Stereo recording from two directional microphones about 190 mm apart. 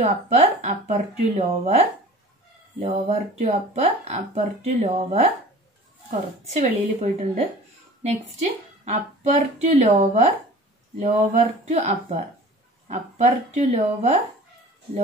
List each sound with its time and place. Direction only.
0.0 s speech: 35° right (ahead or behind)
8.8 s speech: 35° right (ahead or behind)